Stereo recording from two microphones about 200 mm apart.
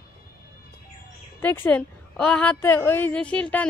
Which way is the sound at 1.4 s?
10° left (ahead or behind).